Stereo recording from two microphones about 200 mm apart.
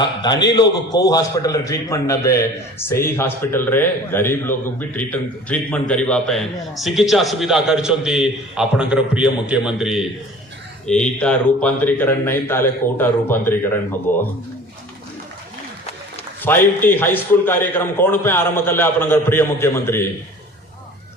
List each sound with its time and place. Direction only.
0.0 s a man's voice: 20° left (ahead or behind)
16.5 s a man's voice: 10° left (ahead or behind)